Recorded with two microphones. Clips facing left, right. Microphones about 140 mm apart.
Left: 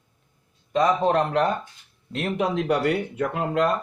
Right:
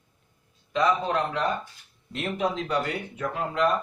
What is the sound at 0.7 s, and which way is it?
Speech, 40° left (ahead or behind).